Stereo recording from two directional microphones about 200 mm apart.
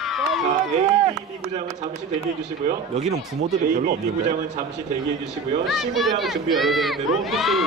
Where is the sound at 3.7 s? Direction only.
45° right (ahead or behind).